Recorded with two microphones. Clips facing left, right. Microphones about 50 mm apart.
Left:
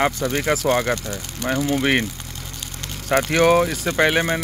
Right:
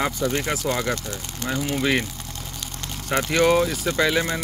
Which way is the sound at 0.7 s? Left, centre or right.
Left.